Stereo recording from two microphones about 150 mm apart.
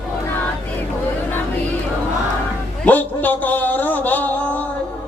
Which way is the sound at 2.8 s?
10° left (ahead or behind).